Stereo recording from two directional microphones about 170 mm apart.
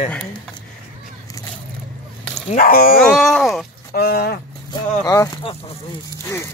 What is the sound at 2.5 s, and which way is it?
Speech, 55° left (ahead or behind).